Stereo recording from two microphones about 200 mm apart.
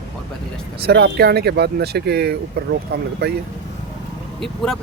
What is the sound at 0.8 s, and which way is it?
Speech, 55° right (ahead or behind).